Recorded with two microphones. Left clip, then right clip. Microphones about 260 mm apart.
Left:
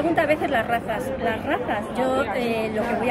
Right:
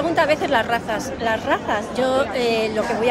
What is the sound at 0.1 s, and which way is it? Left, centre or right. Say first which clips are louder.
A woman's voice: right 5 dB; centre.